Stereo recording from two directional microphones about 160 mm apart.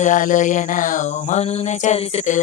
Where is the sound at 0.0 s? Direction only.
55° left (ahead or behind).